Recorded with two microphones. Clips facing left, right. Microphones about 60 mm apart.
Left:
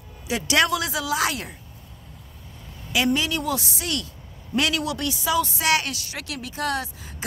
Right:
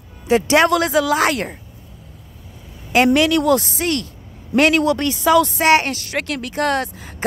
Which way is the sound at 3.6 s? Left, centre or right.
Right.